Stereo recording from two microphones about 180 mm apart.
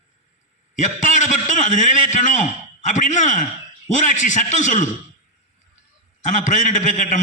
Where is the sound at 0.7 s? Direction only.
40° left (ahead or behind).